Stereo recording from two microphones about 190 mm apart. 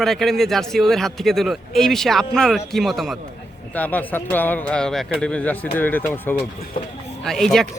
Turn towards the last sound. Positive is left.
turn(degrees=0)  # may be behind; listen again after turning